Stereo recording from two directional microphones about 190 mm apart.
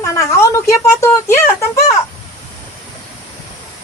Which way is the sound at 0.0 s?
15° left (ahead or behind).